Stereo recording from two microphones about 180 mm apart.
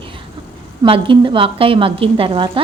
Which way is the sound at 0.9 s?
30° right (ahead or behind).